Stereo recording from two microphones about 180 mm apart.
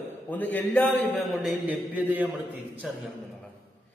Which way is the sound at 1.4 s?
10° right (ahead or behind).